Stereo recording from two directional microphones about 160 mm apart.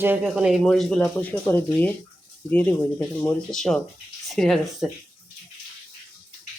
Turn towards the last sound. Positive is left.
turn(degrees=0)  # may be behind; listen again after turning